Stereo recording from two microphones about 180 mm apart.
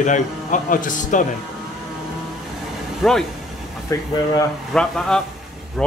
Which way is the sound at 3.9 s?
20° left (ahead or behind).